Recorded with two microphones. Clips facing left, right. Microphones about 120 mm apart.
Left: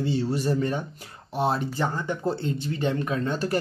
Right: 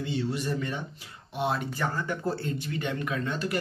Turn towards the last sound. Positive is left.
turn(degrees=35)  # may be behind; listen again after turning